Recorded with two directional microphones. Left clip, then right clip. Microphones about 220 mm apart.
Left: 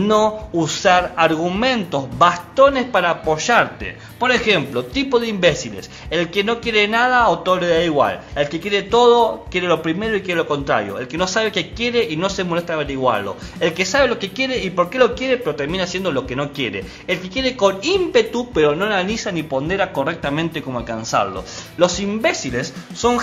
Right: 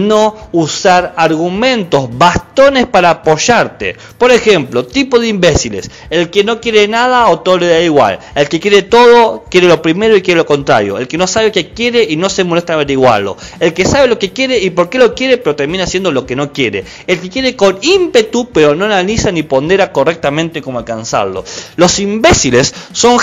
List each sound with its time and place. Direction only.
0.0 s a man's voice: 25° right (ahead or behind)
1.6 s a man's voice: 35° right (ahead or behind)
21.7 s speech: 40° right (ahead or behind)